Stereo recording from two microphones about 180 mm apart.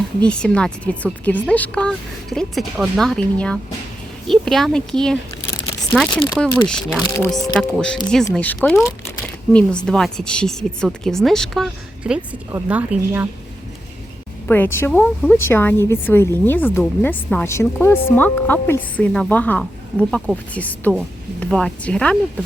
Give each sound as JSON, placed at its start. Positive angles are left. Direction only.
{"t": 0.2, "sound": "speech", "side_deg": 5}
{"t": 6.1, "sound": "speech", "side_deg": 25}
{"t": 6.4, "sound": "speech", "side_deg": 5}
{"t": 7.3, "sound": "speech", "side_deg": 20}
{"t": 8.3, "sound": "speech", "side_deg": 5}
{"t": 14.4, "sound": "a woman's voice", "side_deg": 10}